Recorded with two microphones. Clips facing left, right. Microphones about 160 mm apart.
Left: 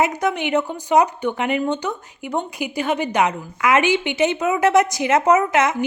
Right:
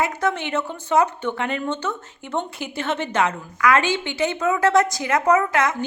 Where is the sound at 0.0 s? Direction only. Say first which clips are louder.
Left 3 dB; 15° left (ahead or behind).